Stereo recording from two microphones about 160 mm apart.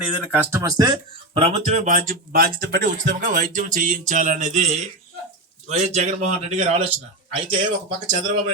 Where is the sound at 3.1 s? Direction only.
55° right (ahead or behind).